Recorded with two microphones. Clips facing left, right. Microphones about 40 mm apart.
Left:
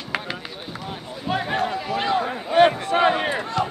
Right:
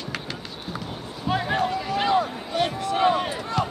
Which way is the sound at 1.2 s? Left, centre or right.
Centre.